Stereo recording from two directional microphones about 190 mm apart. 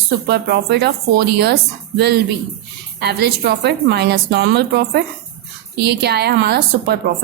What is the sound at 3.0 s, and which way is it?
A woman's voice, 55° right (ahead or behind).